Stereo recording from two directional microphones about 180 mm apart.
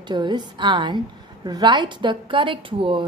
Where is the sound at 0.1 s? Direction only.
25° right (ahead or behind).